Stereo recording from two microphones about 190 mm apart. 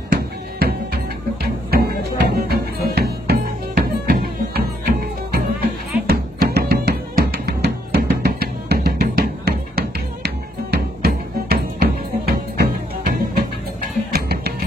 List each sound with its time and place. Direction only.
0.1 s music: 55° right (ahead or behind)